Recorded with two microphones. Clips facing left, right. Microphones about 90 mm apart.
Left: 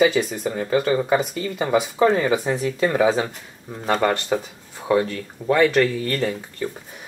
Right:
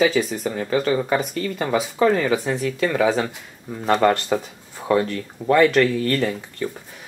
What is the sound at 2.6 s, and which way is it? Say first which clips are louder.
Speech: left 2 dB; 25° left (ahead or behind).